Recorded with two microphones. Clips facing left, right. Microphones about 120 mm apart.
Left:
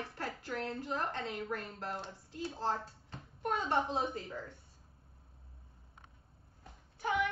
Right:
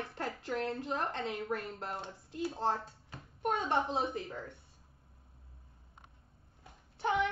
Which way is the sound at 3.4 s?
20° right (ahead or behind).